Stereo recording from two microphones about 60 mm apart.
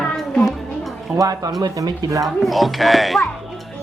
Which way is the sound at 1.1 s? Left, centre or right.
Right.